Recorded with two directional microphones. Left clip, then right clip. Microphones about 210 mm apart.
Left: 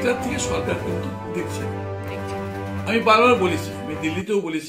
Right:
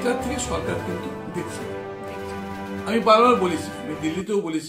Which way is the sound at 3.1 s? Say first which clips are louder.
Even; centre (ahead or behind).